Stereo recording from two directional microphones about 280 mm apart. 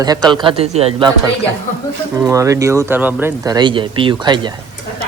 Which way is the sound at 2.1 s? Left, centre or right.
Centre.